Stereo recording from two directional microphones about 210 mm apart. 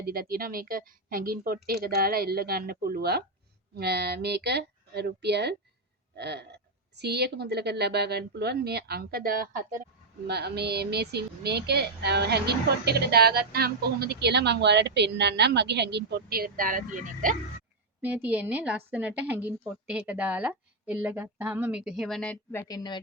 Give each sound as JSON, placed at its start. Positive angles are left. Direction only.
{"t": 0.0, "sound": "a woman's voice", "side_deg": -45}
{"t": 18.0, "sound": "a woman's voice", "side_deg": -10}
{"t": 22.6, "sound": "speech", "side_deg": 20}